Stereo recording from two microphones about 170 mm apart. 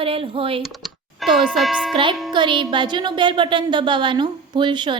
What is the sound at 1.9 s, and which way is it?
A woman's voice, 30° right (ahead or behind).